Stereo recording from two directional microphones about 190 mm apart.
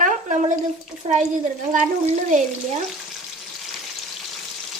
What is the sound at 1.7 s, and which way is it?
Speech, 40° right (ahead or behind).